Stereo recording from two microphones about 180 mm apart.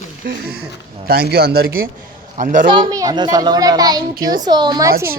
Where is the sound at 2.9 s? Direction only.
20° right (ahead or behind).